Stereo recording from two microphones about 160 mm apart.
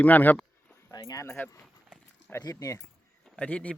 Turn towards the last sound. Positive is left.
turn(degrees=10)  # may be behind; listen again after turning